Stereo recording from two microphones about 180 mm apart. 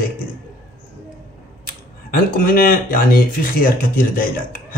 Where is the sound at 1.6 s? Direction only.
50° left (ahead or behind).